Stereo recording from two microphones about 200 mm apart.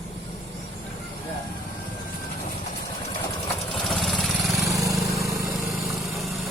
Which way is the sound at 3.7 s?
Centre (ahead or behind).